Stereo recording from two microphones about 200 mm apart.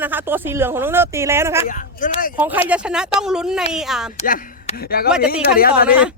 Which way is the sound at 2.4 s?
10° right (ahead or behind).